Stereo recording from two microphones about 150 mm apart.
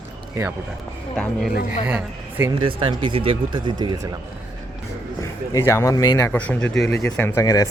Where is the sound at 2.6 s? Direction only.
35° right (ahead or behind).